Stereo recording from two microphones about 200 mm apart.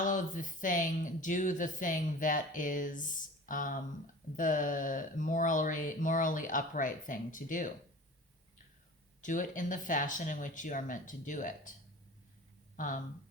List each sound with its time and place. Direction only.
0.0 s speech: 40° left (ahead or behind)
9.2 s speech: 40° left (ahead or behind)
12.7 s speech: 40° left (ahead or behind)